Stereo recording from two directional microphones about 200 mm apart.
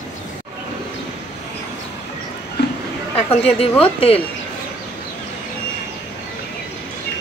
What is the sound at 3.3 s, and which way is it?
Speech, 30° left (ahead or behind).